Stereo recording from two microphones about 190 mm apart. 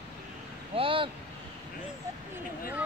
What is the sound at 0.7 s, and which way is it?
Vehicle, 30° right (ahead or behind).